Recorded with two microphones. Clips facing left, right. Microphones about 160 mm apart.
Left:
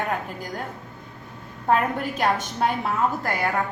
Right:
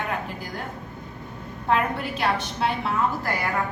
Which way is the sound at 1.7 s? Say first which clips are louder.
Left 2 dB; 45° left (ahead or behind).